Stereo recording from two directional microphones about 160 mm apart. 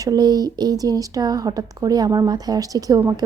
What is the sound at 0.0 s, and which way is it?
Speech, 25° right (ahead or behind).